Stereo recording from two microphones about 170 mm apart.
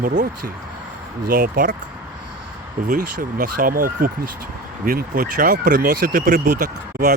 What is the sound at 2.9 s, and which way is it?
Speech, 50° right (ahead or behind).